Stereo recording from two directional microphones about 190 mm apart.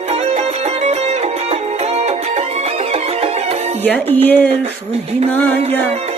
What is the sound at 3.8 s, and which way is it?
Speech, 10° left (ahead or behind).